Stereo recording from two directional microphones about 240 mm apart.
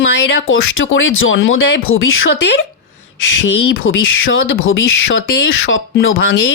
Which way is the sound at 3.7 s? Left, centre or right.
Left.